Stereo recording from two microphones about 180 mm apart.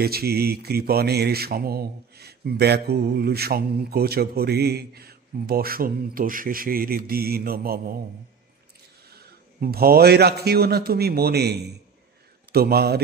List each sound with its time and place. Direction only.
0.0 s speech: 60° right (ahead or behind)
9.1 s a man's voice: 60° right (ahead or behind)